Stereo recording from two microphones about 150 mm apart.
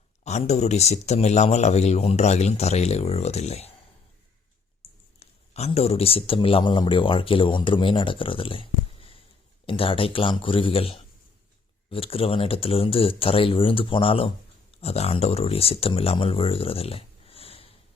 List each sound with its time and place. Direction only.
0.3 s a man's voice: 50° left (ahead or behind)
5.2 s speech: 45° left (ahead or behind)